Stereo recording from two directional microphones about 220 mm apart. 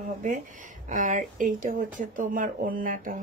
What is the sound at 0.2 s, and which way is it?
Speech, 35° right (ahead or behind).